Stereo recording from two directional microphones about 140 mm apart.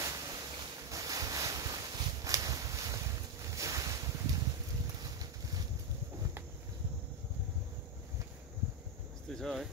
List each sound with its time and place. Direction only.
0.0 s ocean: 25° right (ahead or behind)
5.0 s a sound: 25° right (ahead or behind)
9.3 s cricket: centre (ahead or behind)